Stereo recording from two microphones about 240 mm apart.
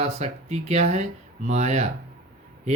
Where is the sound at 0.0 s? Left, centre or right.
Right.